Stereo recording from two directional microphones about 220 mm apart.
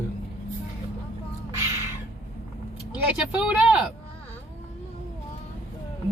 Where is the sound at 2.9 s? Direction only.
5° right (ahead or behind).